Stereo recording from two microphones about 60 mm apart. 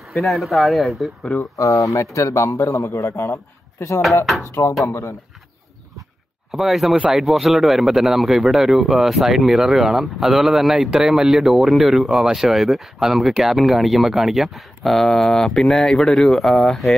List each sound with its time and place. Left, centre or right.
0.0 s speech: centre
1.4 s speech: left
2.0 s speech: left
4.5 s speech: left
6.5 s speech: centre